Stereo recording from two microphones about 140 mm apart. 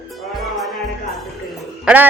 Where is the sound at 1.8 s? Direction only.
10° right (ahead or behind).